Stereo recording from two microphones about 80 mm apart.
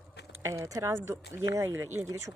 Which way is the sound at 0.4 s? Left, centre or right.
Right.